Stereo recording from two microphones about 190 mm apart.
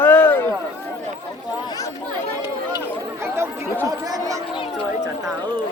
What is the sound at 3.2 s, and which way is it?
Chatter, 15° right (ahead or behind).